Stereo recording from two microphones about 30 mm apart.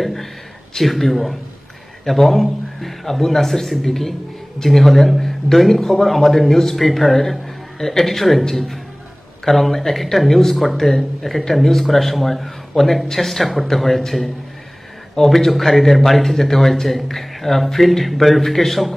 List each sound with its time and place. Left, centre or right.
0.0 s a man's voice: centre